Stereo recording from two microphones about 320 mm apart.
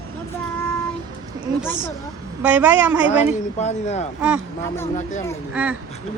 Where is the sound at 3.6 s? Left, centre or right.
Left.